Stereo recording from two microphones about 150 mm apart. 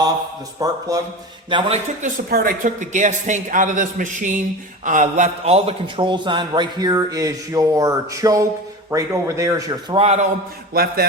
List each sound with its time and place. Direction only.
0.6 s a man's voice: 25° right (ahead or behind)
2.0 s a man's voice: 65° right (ahead or behind); by 9.7 s 20° right (ahead or behind)
9.9 s a man's voice: 45° right (ahead or behind)
10.8 s a sound: 90° right